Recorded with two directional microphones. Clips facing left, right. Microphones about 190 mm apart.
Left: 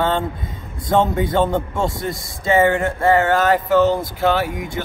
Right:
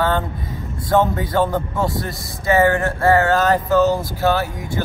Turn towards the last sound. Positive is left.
turn(degrees=20)  # may be behind; listen again after turning